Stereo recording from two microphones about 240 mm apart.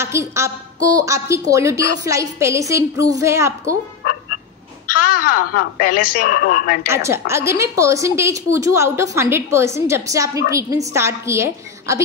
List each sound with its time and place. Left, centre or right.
0.0 s a woman's voice: centre
5.0 s a woman's voice: left
6.9 s a woman's voice: centre